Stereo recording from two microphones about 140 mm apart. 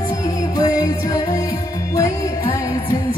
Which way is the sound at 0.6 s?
25° left (ahead or behind).